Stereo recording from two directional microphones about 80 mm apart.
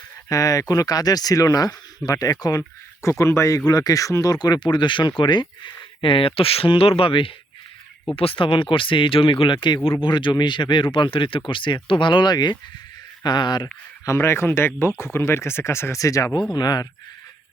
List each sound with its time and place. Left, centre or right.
0.3 s speech: left
3.7 s speech: left
8.4 s speech: left
10.0 s speech: left
14.0 s speech: left
16.5 s speech: left